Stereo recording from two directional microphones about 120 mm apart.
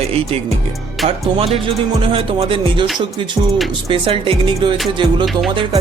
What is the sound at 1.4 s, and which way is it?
Speech, 50° right (ahead or behind).